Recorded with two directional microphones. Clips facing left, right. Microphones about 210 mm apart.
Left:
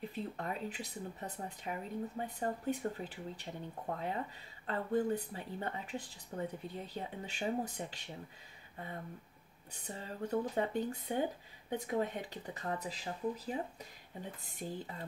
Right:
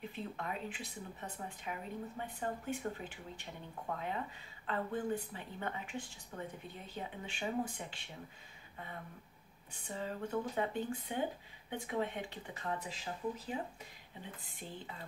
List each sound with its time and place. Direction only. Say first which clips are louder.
0.1 s speech: left 2 dB; 40° left (ahead or behind)
9.7 s speech: right 3 dB; 40° left (ahead or behind)
14.4 s speech: left 5 dB; 40° left (ahead or behind)